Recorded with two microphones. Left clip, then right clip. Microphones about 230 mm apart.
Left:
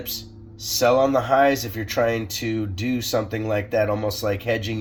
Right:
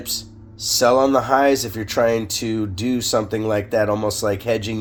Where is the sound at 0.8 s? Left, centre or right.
Right.